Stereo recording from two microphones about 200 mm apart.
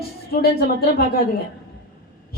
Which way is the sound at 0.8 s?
50° left (ahead or behind).